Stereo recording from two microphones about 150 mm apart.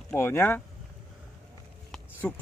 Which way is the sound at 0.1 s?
10° left (ahead or behind).